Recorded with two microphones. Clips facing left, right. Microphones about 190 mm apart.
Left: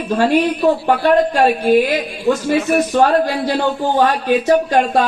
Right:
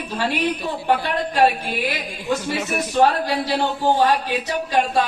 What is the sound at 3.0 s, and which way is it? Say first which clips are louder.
Speech: left 4 dB; 50° left (ahead or behind).